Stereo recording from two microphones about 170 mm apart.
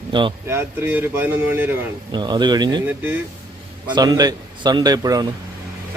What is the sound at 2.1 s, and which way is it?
Speech, 25° right (ahead or behind).